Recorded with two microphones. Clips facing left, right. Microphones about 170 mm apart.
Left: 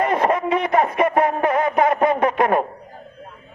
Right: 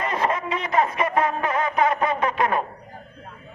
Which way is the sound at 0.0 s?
55° left (ahead or behind).